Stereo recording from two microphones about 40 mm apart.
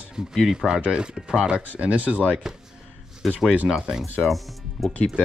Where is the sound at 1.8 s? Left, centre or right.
Right.